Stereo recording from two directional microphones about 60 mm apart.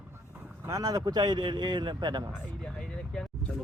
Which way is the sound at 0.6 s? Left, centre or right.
Right.